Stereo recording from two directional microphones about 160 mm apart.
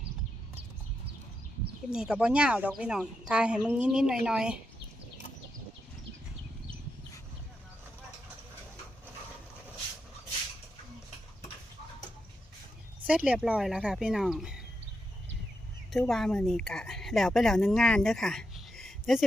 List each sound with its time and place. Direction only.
1.9 s a woman's voice: 5° right (ahead or behind)
13.1 s a woman's voice: 5° right (ahead or behind)
15.9 s a woman's voice: centre (ahead or behind)